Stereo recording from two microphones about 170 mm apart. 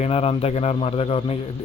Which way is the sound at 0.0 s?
35° left (ahead or behind).